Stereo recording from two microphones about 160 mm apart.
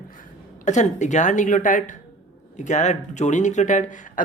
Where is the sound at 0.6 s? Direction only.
50° left (ahead or behind).